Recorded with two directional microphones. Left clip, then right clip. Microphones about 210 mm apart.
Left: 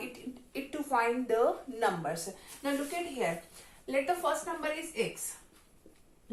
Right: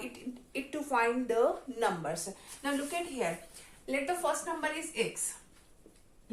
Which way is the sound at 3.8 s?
30° right (ahead or behind).